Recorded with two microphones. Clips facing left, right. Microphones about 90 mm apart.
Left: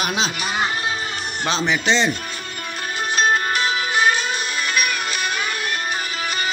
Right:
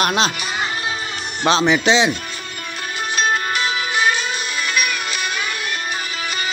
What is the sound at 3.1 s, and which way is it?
Music, 40° left (ahead or behind).